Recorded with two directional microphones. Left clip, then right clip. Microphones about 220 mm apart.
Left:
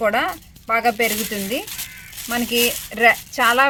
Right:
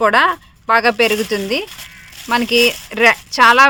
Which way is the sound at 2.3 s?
50° right (ahead or behind).